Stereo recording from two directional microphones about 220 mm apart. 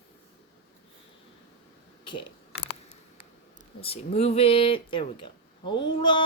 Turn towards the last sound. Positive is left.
turn(degrees=20)  # may be behind; listen again after turning